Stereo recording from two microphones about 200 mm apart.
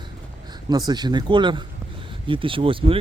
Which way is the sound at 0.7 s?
20° right (ahead or behind).